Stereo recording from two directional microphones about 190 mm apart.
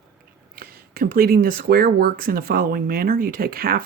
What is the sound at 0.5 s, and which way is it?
Speech, 50° right (ahead or behind).